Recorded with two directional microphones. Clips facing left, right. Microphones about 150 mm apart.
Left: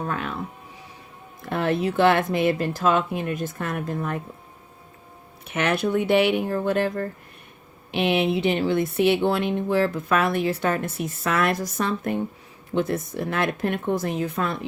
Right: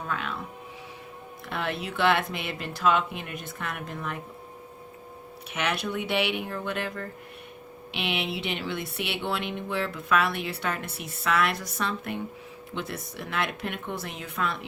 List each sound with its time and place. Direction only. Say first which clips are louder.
0.1 s speech: left 3 dB; 40° left (ahead or behind)
1.5 s speech: left 9 dB; 45° left (ahead or behind)
5.5 s speech: left 7 dB; 50° left (ahead or behind)